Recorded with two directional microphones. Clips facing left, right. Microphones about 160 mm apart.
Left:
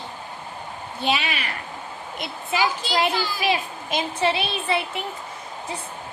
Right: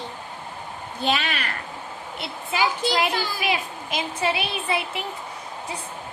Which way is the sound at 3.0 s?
25° left (ahead or behind).